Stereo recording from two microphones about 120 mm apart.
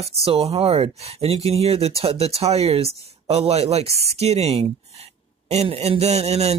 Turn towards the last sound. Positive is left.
turn(degrees=-65)  # may be behind; listen again after turning